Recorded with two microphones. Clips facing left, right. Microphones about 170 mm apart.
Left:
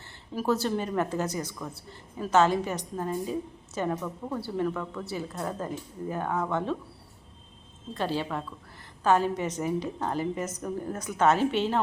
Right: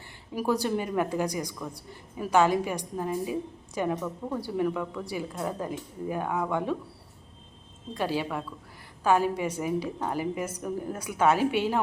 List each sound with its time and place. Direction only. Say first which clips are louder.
0.3 s a woman's voice: even; 15° right (ahead or behind)
7.9 s a woman's voice: right 1 dB; 10° right (ahead or behind)